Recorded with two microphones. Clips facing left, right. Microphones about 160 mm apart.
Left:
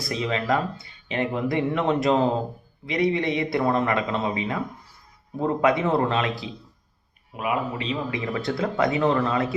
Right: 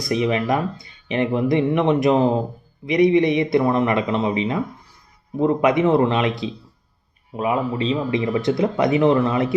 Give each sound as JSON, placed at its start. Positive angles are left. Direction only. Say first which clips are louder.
{"t": 0.1, "sound": "speech", "louder": "right 5 dB", "side_deg": -20}
{"t": 7.3, "sound": "speech", "louder": "right 5 dB", "side_deg": -30}